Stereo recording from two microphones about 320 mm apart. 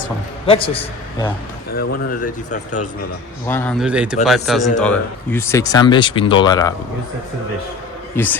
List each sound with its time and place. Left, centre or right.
0.4 s a man's voice: centre
1.7 s speech: left
3.4 s speech: centre
8.1 s speech: centre